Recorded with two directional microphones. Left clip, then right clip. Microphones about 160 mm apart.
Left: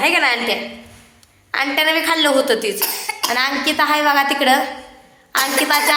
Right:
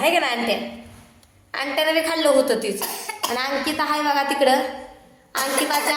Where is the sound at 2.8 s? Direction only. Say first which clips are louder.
Left 5 dB; 15° right (ahead or behind).